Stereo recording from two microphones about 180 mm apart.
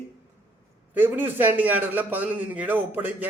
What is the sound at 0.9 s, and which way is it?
A man's voice, 10° right (ahead or behind).